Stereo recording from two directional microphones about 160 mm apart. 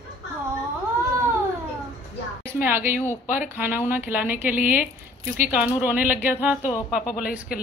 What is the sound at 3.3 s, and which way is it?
A woman's voice, 10° right (ahead or behind).